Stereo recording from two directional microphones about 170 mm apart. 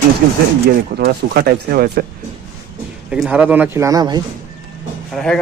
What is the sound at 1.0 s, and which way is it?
A man's voice, 65° right (ahead or behind).